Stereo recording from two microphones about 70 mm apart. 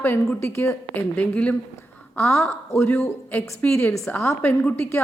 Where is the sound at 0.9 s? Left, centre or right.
Left.